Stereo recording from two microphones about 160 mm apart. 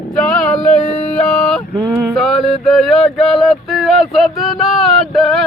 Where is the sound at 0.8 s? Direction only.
45° left (ahead or behind).